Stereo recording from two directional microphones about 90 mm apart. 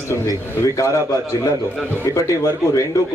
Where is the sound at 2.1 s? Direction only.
35° left (ahead or behind).